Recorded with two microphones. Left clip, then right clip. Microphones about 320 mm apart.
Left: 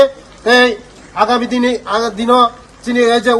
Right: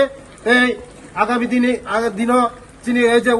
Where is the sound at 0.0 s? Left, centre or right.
Centre.